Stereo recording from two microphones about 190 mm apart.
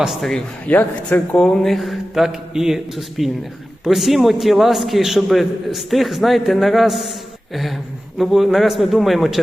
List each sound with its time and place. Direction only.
0.0 s speech: centre (ahead or behind)